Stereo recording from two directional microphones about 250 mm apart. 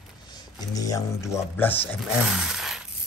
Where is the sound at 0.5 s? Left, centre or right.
Centre.